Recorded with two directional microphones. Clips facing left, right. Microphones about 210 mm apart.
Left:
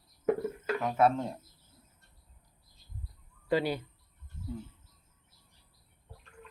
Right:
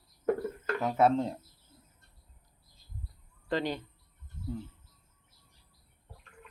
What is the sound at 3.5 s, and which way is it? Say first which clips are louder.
Speech: left 3 dB; 10° left (ahead or behind).